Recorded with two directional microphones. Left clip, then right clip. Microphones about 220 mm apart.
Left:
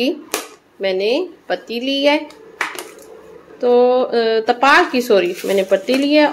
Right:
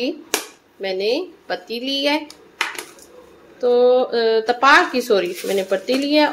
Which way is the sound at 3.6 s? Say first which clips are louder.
Left 2 dB; 10° left (ahead or behind).